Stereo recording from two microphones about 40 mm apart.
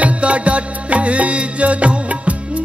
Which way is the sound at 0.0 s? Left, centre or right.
Right.